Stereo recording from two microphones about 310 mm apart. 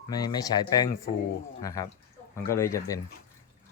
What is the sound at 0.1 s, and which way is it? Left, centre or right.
Speech, centre.